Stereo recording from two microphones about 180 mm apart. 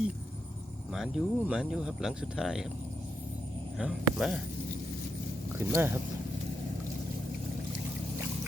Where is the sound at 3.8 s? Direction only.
5° right (ahead or behind).